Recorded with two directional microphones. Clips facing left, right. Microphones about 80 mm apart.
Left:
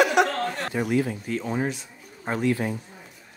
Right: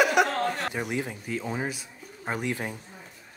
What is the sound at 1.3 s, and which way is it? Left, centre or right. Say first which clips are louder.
Speech: left 4 dB; centre.